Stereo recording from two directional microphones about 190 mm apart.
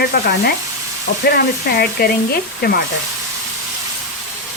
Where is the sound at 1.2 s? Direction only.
55° left (ahead or behind).